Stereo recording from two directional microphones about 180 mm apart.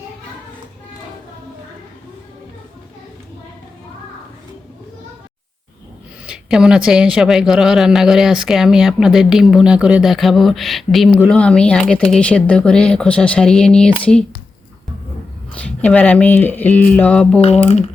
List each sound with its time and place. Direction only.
6.2 s speech: 5° right (ahead or behind)
15.5 s speech: 5° left (ahead or behind)
17.4 s speech: 35° left (ahead or behind)